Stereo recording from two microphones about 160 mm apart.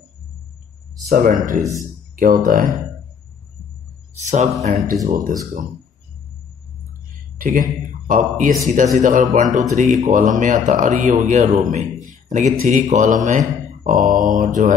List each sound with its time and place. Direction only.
1.0 s mantra: 50° right (ahead or behind)
4.2 s speech: 45° right (ahead or behind)
5.0 s mantra: 60° right (ahead or behind)
7.3 s speech: 55° right (ahead or behind)
13.8 s mantra: 55° right (ahead or behind)